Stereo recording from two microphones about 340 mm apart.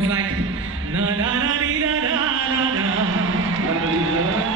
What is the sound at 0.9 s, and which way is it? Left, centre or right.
Music, right.